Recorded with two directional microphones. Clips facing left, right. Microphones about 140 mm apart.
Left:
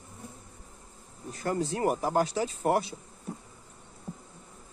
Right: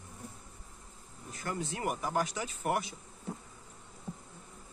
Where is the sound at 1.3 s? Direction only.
35° left (ahead or behind).